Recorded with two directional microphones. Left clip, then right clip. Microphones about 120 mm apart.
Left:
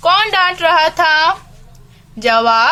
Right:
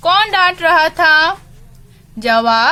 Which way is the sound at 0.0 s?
35° right (ahead or behind).